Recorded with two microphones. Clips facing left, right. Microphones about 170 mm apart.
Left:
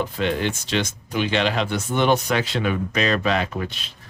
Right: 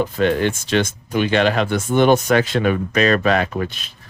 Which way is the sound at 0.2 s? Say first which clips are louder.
Right 7 dB; 50° right (ahead or behind).